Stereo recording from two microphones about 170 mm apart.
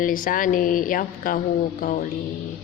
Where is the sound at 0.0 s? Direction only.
55° left (ahead or behind).